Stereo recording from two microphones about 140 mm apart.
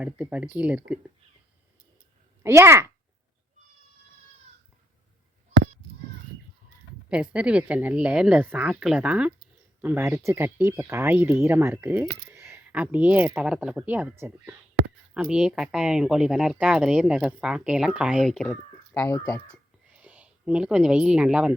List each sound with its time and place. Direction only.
0.0 s speech: 10° right (ahead or behind)
2.4 s a child's voice: 20° right (ahead or behind)
7.1 s speech: 10° right (ahead or behind)
18.3 s speech: 5° left (ahead or behind)
18.9 s speech: 15° left (ahead or behind)
19.9 s a woman's voice: 10° right (ahead or behind)